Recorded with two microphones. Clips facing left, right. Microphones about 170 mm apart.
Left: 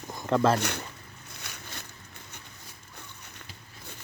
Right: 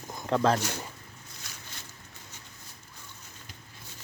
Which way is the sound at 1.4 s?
65° left (ahead or behind).